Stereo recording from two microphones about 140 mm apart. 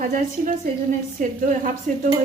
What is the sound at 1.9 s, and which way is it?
Speech, 60° right (ahead or behind).